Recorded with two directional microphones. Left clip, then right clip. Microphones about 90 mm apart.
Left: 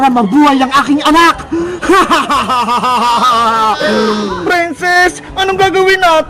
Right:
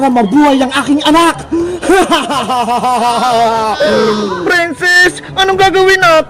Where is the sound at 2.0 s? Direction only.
35° left (ahead or behind).